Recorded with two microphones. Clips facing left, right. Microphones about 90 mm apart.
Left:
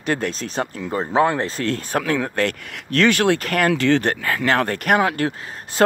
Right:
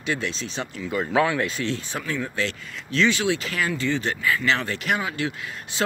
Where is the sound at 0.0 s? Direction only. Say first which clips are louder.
Left 5 dB; 50° left (ahead or behind).